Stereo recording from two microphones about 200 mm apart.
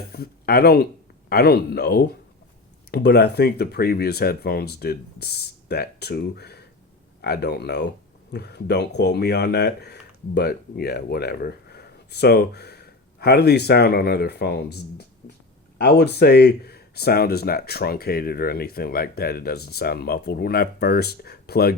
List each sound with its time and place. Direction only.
0.1 s speech: 50° left (ahead or behind)